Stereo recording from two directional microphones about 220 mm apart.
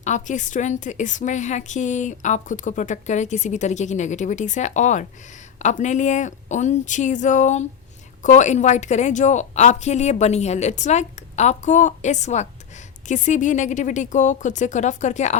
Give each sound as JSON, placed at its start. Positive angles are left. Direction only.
{"t": 0.0, "sound": "a woman's voice", "side_deg": 35}